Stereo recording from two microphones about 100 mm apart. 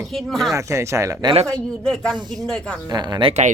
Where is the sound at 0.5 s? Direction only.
30° right (ahead or behind).